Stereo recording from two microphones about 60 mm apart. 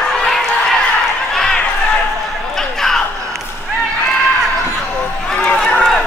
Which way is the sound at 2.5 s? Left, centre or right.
Centre.